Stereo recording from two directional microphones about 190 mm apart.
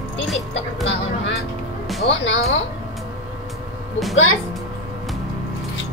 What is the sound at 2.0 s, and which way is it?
Speech, 75° left (ahead or behind).